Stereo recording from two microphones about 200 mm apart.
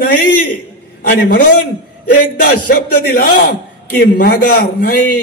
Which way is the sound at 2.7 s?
50° left (ahead or behind).